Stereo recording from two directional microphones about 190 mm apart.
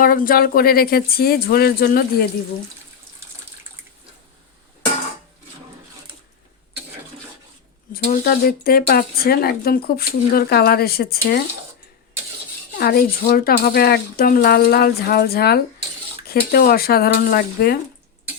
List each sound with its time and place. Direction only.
0.0 s speech: 50° left (ahead or behind)
7.9 s speech: 50° left (ahead or behind)
12.8 s speech: 55° left (ahead or behind)